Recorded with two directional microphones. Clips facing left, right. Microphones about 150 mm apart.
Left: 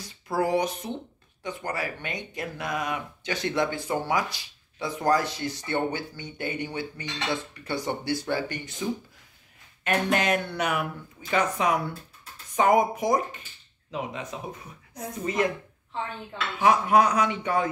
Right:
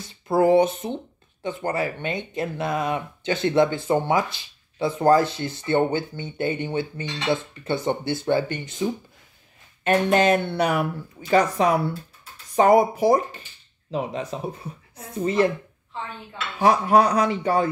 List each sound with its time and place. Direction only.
0.0 s speech: 25° right (ahead or behind)
9.8 s speech: 30° right (ahead or behind)
16.5 s speech: 35° right (ahead or behind)